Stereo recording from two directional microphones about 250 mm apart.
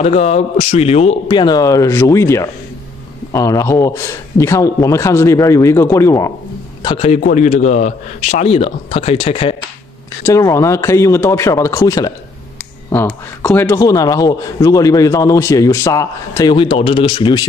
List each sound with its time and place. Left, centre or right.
0.0 s a man's voice: left
6.8 s a man's voice: left
10.2 s a man's voice: centre